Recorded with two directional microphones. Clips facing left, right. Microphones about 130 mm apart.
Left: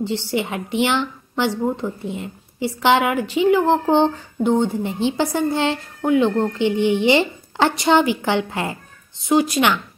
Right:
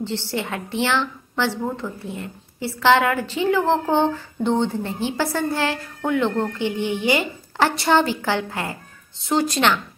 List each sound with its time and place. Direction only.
0.0 s a woman's voice: 15° left (ahead or behind)